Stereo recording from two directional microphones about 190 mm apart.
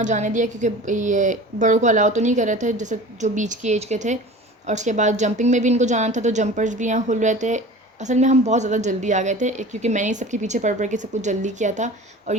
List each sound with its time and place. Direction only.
0.0 s a woman's voice: 40° right (ahead or behind)